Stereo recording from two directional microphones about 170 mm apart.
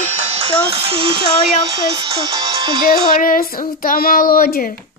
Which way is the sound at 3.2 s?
55° left (ahead or behind).